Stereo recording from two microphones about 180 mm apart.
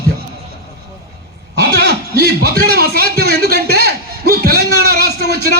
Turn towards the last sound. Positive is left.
turn(degrees=-60)  # may be behind; listen again after turning